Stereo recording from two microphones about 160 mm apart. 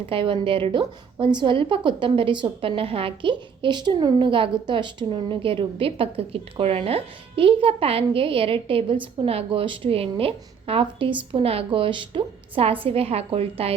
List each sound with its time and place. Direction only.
0.1 s a woman's voice: 35° right (ahead or behind)